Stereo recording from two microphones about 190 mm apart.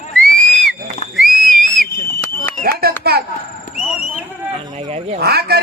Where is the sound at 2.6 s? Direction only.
55° right (ahead or behind).